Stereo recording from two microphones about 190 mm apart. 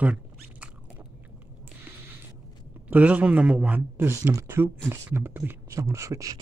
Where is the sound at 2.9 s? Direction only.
5° right (ahead or behind).